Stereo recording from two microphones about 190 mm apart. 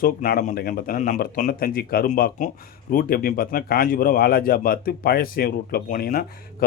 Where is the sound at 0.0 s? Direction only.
45° left (ahead or behind).